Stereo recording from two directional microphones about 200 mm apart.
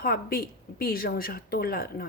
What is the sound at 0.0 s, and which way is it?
Speech, 45° left (ahead or behind).